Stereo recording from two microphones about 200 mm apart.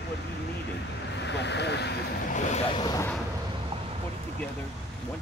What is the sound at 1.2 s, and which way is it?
Speech, 60° left (ahead or behind).